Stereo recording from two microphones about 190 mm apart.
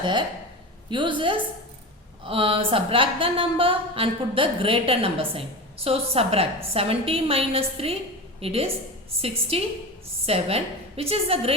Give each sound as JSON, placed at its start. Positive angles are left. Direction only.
{"t": 0.0, "sound": "a woman's voice", "side_deg": -25}